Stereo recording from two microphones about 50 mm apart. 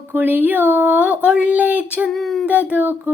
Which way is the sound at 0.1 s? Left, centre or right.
Right.